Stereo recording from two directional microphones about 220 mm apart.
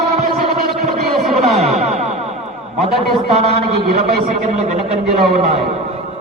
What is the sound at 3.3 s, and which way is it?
Speech, 30° right (ahead or behind).